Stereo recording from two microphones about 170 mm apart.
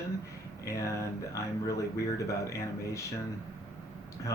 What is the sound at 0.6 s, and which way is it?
Speech, 20° left (ahead or behind).